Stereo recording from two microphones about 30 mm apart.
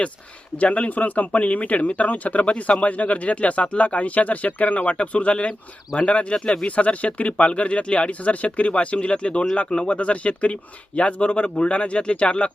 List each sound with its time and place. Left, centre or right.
0.5 s speech: left
4.9 s speech: left
9.9 s speech: left